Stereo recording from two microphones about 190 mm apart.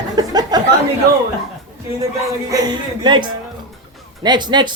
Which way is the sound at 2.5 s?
20° right (ahead or behind).